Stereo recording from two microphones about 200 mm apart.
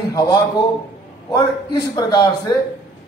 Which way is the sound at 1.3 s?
20° left (ahead or behind).